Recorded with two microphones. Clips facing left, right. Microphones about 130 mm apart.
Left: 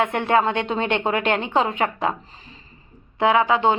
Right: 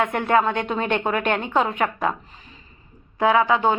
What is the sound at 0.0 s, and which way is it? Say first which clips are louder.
A woman's voice: even; 25° left (ahead or behind).